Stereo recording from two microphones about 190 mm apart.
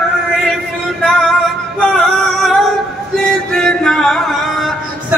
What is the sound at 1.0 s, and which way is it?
Male singing, 5° left (ahead or behind).